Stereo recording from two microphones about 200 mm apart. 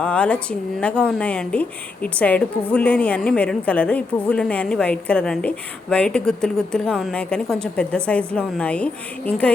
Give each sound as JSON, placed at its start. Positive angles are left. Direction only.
{"t": 0.0, "sound": "a woman's voice", "side_deg": 5}